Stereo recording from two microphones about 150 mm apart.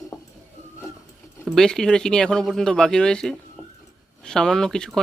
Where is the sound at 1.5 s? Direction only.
5° left (ahead or behind).